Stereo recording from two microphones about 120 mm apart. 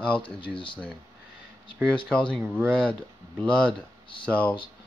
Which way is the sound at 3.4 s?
10° left (ahead or behind).